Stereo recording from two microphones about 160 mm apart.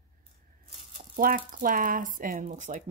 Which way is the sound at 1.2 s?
60° right (ahead or behind).